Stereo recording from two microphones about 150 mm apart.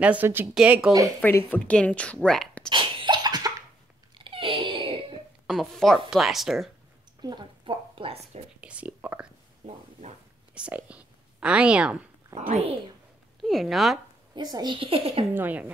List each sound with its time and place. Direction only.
0.0 s a woman's voice: 10° right (ahead or behind)
1.2 s a woman's voice: 10° left (ahead or behind)
2.7 s cough: 30° right (ahead or behind)
4.2 s wail: 35° right (ahead or behind)
5.5 s a woman's voice: centre (ahead or behind)
7.2 s a woman's voice: 30° right (ahead or behind)
8.2 s speech: 10° right (ahead or behind)
10.5 s speech: 10° right (ahead or behind)
12.4 s speech: 45° right (ahead or behind)
13.4 s a woman's voice: centre (ahead or behind)
14.3 s a child's voice: 25° right (ahead or behind)
15.3 s a woman's voice: 10° right (ahead or behind)